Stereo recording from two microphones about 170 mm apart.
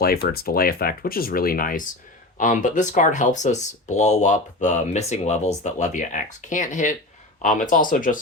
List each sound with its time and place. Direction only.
0.0 s speech: 60° left (ahead or behind)